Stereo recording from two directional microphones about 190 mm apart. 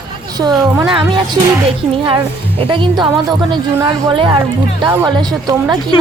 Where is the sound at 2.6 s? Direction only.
25° right (ahead or behind).